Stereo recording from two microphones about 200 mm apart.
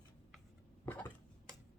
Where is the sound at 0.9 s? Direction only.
10° left (ahead or behind).